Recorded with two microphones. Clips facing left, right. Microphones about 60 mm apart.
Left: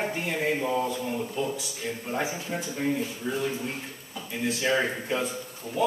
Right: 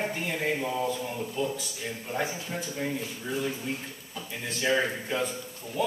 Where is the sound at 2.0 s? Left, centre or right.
Left.